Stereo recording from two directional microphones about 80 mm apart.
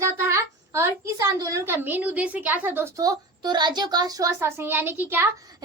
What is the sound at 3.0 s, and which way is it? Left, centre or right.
A child's voice, right.